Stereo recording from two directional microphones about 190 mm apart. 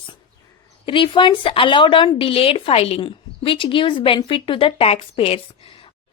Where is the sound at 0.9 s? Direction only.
25° left (ahead or behind).